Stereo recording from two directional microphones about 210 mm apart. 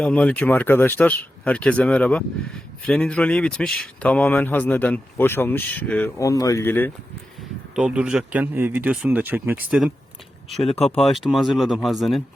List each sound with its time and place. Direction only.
0.0 s speech: 5° left (ahead or behind)
7.8 s speech: 5° right (ahead or behind)
10.7 s speech: 30° left (ahead or behind)
11.0 s speech: centre (ahead or behind)